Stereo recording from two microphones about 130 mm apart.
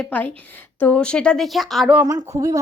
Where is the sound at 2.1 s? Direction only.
25° right (ahead or behind).